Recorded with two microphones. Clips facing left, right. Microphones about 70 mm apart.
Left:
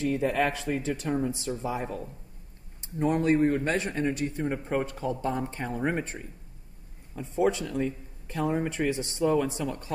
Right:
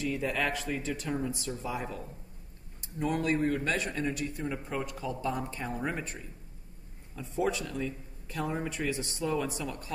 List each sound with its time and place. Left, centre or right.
0.0 s speech: left